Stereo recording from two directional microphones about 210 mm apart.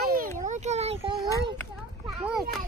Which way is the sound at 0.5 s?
30° right (ahead or behind).